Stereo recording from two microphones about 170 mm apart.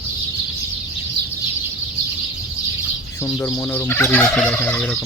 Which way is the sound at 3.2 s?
15° left (ahead or behind).